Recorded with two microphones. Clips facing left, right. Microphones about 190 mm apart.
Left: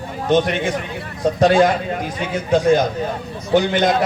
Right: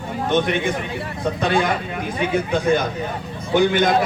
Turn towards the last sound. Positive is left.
turn(degrees=-55)  # may be behind; listen again after turning